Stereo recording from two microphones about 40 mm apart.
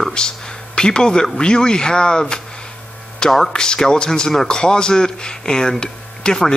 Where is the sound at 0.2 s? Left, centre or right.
Centre.